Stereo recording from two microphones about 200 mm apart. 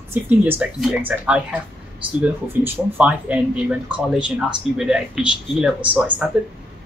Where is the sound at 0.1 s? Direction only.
10° right (ahead or behind).